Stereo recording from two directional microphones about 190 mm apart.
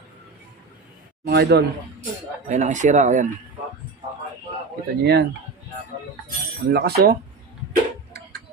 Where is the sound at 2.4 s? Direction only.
40° right (ahead or behind).